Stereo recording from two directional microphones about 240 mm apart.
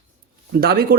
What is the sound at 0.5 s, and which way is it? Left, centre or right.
Speech, right.